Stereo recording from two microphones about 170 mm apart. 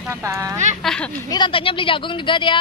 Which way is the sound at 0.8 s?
5° left (ahead or behind).